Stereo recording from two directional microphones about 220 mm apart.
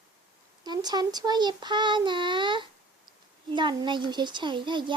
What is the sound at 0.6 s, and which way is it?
Speech, 20° right (ahead or behind).